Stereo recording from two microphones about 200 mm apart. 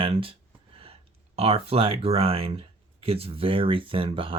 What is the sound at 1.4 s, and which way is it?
Speech, 30° right (ahead or behind).